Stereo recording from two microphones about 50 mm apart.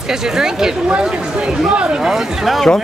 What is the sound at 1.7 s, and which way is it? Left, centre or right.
Speech, centre.